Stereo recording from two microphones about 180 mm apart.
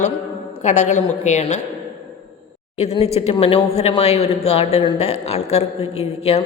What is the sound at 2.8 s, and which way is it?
A woman's voice, 35° left (ahead or behind).